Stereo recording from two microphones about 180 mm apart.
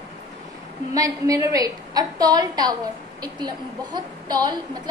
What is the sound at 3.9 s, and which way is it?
Speech, 25° right (ahead or behind).